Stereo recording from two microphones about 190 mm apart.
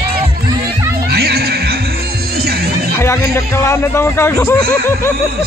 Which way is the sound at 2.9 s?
15° left (ahead or behind).